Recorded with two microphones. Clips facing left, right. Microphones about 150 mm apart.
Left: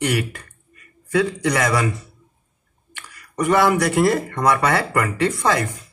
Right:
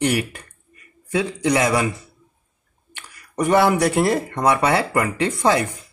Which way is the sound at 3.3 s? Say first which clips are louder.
Even; 25° right (ahead or behind).